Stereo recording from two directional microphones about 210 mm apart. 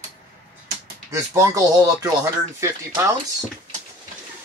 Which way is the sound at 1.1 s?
15° right (ahead or behind).